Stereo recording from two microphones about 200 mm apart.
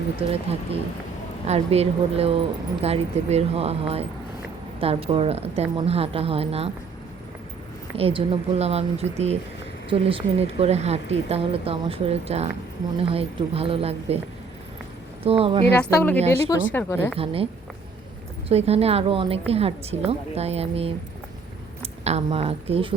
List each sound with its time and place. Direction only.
0.2 s a woman's voice: 30° right (ahead or behind)
7.9 s a woman's voice: 25° right (ahead or behind)
15.2 s speech: 30° right (ahead or behind)
15.7 s speech: 10° left (ahead or behind)
17.2 s a woman's voice: 30° right (ahead or behind)